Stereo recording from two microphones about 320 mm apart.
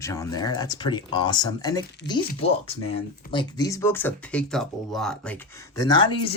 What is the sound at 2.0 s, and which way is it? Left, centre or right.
Speech, left.